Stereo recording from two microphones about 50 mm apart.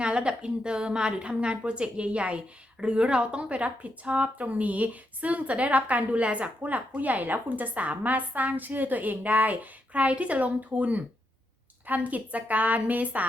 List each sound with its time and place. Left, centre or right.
0.0 s a woman's voice: right